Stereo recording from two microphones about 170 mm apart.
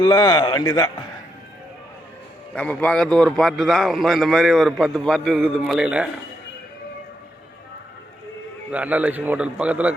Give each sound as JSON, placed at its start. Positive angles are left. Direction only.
{"t": 0.0, "sound": "a man's voice", "side_deg": 20}
{"t": 2.6, "sound": "a man's voice", "side_deg": 5}
{"t": 8.7, "sound": "a man's voice", "side_deg": -10}